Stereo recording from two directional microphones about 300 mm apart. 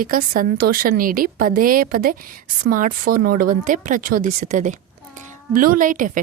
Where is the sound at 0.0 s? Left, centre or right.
Right.